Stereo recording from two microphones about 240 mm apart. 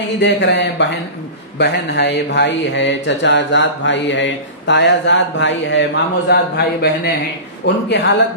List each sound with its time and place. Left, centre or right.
0.2 s speech: left